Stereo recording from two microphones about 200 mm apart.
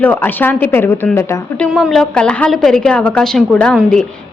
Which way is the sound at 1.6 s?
Centre (ahead or behind).